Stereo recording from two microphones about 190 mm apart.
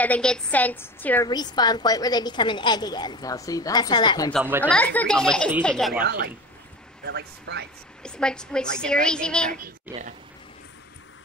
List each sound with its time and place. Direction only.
0.0 s a woman's voice: 5° left (ahead or behind)
1.3 s a woman's voice: 20° left (ahead or behind)
4.6 s a woman's voice: 5° left (ahead or behind)
5.9 s speech: 55° right (ahead or behind)
8.0 s a woman's voice: 5° left (ahead or behind)
9.5 s a child's voice: 40° right (ahead or behind)